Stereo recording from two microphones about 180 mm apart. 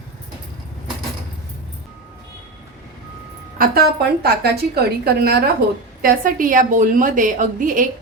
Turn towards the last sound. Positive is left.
turn(degrees=-45)  # may be behind; listen again after turning